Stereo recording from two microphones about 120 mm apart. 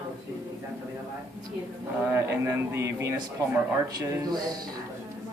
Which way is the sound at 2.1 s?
25° right (ahead or behind).